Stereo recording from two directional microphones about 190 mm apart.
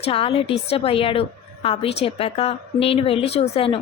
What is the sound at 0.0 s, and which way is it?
A woman's voice, 30° left (ahead or behind).